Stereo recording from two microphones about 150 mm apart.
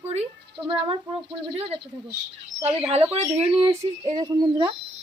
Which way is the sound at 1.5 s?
45° right (ahead or behind).